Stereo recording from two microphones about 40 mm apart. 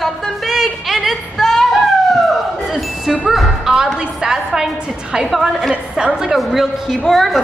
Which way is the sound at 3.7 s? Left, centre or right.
Centre.